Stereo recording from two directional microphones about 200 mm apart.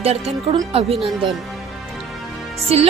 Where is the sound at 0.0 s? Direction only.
30° right (ahead or behind).